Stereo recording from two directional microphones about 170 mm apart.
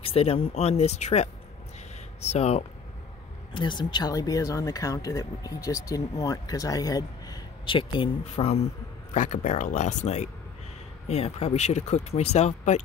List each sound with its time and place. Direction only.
0.0 s speech: 35° left (ahead or behind)
3.5 s speech: 25° left (ahead or behind)